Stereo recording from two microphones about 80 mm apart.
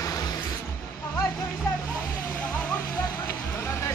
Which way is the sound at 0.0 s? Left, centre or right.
Left.